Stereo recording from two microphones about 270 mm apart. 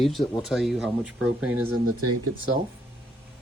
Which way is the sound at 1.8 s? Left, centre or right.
Right.